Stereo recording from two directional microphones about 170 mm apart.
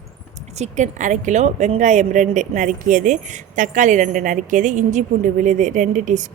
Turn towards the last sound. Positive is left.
turn(degrees=-45)  # may be behind; listen again after turning